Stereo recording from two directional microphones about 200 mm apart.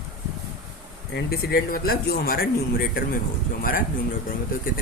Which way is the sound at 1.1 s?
55° left (ahead or behind).